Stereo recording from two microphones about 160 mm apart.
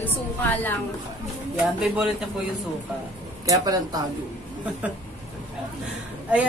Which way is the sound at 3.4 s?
25° right (ahead or behind).